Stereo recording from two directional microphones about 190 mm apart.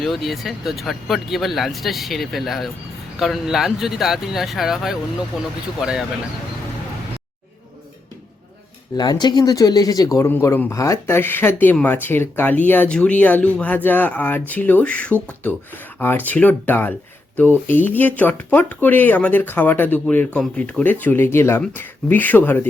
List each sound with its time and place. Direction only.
0.0 s speech: centre (ahead or behind)
9.0 s speech: 20° left (ahead or behind)